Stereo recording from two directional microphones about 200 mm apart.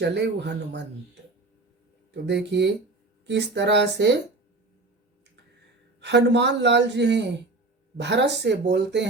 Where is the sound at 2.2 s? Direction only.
60° right (ahead or behind).